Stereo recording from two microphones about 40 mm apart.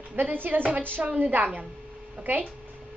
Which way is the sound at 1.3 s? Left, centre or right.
Right.